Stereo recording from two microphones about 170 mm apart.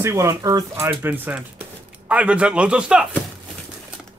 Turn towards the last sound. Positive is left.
turn(degrees=-5)  # may be behind; listen again after turning